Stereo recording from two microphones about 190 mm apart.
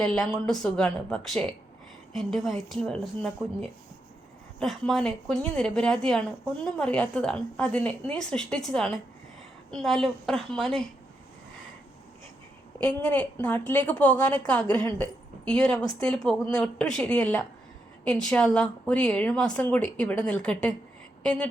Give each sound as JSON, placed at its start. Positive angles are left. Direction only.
{"t": 0.0, "sound": "a woman's voice", "side_deg": 5}
{"t": 12.8, "sound": "a woman's voice", "side_deg": 10}